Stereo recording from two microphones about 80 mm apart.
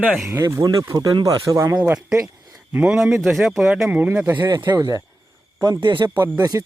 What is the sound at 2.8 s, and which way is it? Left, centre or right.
Speech, centre.